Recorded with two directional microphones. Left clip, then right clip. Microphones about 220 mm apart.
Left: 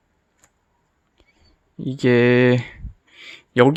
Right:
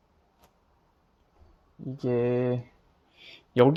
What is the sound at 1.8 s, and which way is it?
Speech, 45° left (ahead or behind).